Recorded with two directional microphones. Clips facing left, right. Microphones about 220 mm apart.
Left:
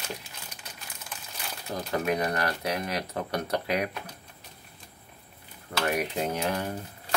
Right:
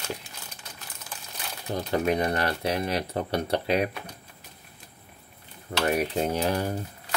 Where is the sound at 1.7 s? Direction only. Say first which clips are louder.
Right 3 dB; 30° right (ahead or behind).